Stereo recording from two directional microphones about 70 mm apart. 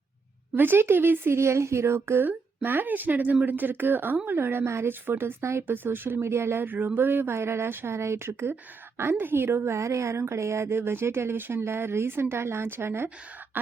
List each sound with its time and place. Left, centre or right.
0.5 s speech: right
2.6 s speech: right